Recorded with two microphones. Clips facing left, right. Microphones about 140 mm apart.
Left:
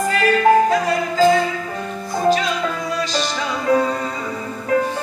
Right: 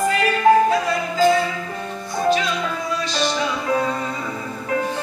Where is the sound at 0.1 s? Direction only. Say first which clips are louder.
Left 2 dB; 40° left (ahead or behind).